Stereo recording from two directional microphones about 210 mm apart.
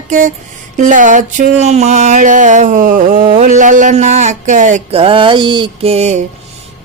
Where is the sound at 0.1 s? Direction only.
40° right (ahead or behind).